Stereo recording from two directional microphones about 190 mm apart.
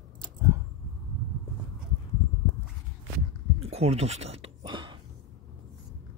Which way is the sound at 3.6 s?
35° right (ahead or behind).